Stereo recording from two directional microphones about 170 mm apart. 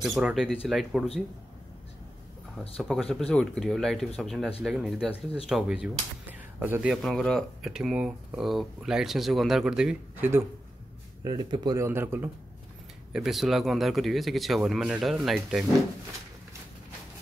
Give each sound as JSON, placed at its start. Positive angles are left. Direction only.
{"t": 0.0, "sound": "speech", "side_deg": -5}
{"t": 2.8, "sound": "speech", "side_deg": 0}
{"t": 6.9, "sound": "speech", "side_deg": 0}
{"t": 11.2, "sound": "speech", "side_deg": -25}
{"t": 13.1, "sound": "speech", "side_deg": 0}